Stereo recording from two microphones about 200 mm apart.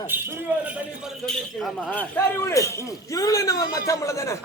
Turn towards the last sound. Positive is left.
turn(degrees=15)  # may be behind; listen again after turning